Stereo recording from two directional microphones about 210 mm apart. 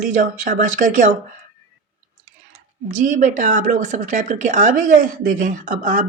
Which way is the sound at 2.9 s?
35° right (ahead or behind).